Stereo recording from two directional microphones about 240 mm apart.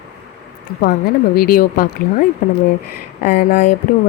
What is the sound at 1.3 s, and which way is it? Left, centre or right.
Speech, left.